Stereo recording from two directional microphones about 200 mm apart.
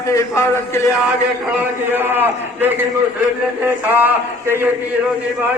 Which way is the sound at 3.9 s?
10° right (ahead or behind).